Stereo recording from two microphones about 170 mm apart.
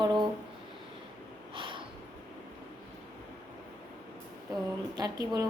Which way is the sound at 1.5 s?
30° right (ahead or behind).